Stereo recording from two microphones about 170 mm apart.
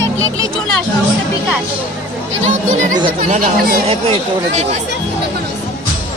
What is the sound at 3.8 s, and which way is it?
Speech, 35° right (ahead or behind).